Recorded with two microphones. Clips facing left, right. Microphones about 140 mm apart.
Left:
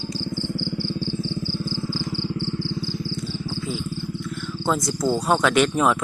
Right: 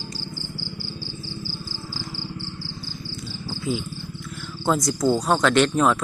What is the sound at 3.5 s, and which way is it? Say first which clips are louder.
Insect: right 5 dB; 5° right (ahead or behind).